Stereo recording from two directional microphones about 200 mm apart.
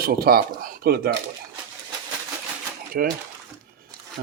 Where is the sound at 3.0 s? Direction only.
45° right (ahead or behind).